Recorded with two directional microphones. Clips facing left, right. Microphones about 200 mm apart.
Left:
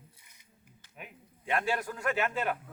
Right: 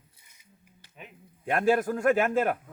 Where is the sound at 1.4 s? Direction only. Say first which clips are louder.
Right 8 dB; 50° right (ahead or behind).